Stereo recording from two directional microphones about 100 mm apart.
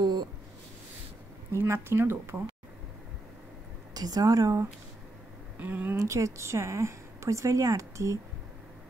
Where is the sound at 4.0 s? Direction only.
40° right (ahead or behind).